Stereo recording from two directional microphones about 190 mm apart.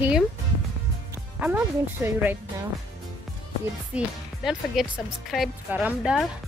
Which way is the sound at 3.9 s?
Centre (ahead or behind).